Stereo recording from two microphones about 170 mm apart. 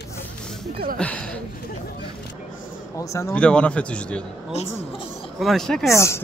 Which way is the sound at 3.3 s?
5° left (ahead or behind).